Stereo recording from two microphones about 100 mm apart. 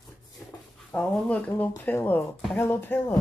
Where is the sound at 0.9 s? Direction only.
15° left (ahead or behind).